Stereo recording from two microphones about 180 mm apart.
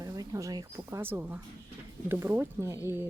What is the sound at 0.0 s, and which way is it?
Speech, 20° right (ahead or behind).